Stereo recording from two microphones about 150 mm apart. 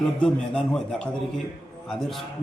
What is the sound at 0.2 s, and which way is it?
A man's voice, 5° left (ahead or behind).